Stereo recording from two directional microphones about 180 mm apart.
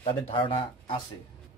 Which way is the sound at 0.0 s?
30° left (ahead or behind).